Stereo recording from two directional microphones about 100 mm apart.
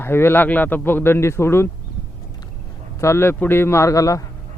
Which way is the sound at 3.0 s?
25° left (ahead or behind).